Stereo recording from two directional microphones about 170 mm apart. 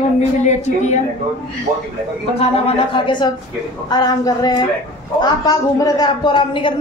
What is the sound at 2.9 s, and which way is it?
Speech, 25° left (ahead or behind).